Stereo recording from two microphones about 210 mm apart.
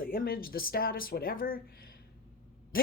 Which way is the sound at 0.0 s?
45° left (ahead or behind).